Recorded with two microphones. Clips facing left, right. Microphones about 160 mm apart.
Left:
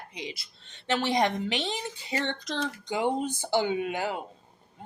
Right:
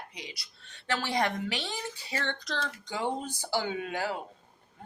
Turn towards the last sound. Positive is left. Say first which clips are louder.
# left 3 dB
turn(degrees=20)  # may be behind; listen again after turning